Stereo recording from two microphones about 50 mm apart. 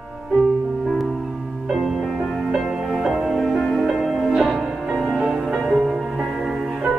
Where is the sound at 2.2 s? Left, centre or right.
Centre.